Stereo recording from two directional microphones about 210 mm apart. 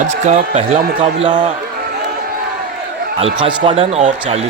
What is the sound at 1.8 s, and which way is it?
Crowd, 50° right (ahead or behind).